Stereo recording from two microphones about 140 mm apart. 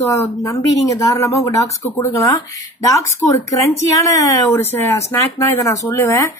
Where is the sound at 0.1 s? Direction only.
25° left (ahead or behind).